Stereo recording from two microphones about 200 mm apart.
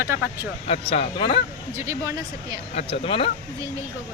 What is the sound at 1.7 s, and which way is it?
Speech, 15° right (ahead or behind).